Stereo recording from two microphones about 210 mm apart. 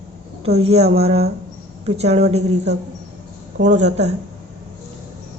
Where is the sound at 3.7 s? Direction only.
35° right (ahead or behind).